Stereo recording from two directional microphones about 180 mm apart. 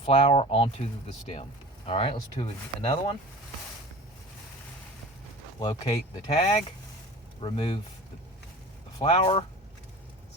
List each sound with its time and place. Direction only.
0.0 s speech: 35° left (ahead or behind)
6.2 s speech: 35° left (ahead or behind)
9.0 s speech: 30° left (ahead or behind)